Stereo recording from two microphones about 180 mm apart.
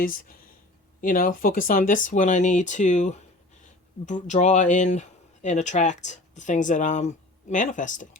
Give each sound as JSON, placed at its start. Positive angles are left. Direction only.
{"t": 0.0, "sound": "speech", "side_deg": 50}